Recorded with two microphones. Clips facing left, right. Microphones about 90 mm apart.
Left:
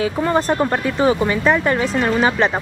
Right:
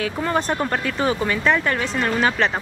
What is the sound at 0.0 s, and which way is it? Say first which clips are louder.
Speech: left 4 dB; 15° left (ahead or behind).